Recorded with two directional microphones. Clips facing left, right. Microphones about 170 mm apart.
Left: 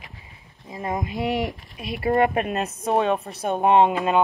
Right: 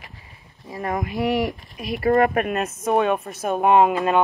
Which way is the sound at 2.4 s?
30° left (ahead or behind).